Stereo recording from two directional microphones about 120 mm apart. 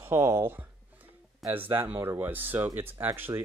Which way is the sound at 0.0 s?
25° right (ahead or behind).